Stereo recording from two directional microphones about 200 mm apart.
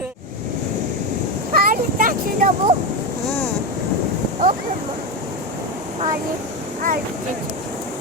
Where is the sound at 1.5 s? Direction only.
45° right (ahead or behind).